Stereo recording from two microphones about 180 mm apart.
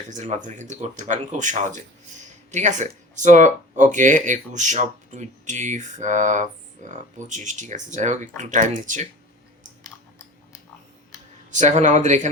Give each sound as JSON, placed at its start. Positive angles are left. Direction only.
{"t": 0.1, "sound": "speech", "side_deg": -40}
{"t": 11.5, "sound": "speech", "side_deg": -40}